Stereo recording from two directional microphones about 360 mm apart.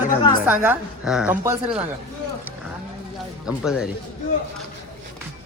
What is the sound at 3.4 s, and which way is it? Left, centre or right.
Speech, centre.